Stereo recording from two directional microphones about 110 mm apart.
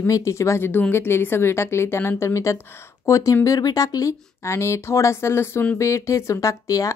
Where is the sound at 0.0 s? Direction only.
25° left (ahead or behind).